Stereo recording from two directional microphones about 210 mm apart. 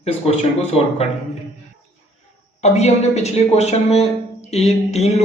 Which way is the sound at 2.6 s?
30° left (ahead or behind).